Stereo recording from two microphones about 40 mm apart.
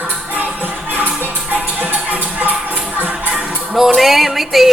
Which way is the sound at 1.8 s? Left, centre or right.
Right.